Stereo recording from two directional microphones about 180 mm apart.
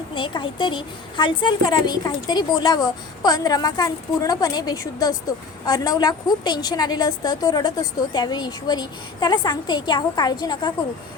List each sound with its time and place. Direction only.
0.1 s a woman's voice: 25° left (ahead or behind)